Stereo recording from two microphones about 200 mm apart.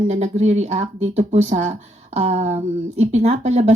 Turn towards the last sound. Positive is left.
turn(degrees=-35)  # may be behind; listen again after turning